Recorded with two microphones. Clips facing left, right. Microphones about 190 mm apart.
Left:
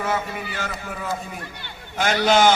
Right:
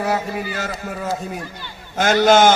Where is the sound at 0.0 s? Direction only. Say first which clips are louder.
Right 4 dB; 40° right (ahead or behind).